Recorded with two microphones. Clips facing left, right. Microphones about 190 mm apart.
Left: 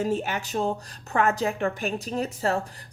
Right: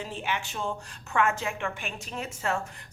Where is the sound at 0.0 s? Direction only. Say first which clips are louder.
Left 7 dB; 40° left (ahead or behind).